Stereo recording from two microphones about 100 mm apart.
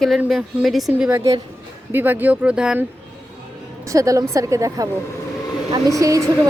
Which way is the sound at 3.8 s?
35° right (ahead or behind).